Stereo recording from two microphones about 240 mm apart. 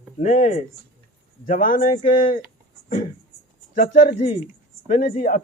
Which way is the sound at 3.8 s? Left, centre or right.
Left.